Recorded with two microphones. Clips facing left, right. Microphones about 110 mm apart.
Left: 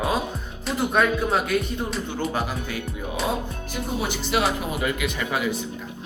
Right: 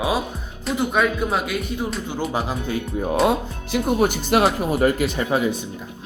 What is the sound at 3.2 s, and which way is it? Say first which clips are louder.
Speech: right 6 dB; 75° right (ahead or behind).